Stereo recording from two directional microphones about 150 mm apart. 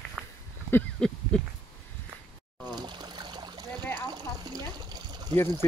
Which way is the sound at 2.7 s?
30° right (ahead or behind).